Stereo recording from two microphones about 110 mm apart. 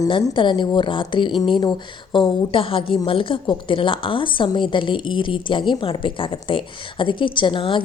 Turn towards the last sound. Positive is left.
turn(degrees=50)  # may be behind; listen again after turning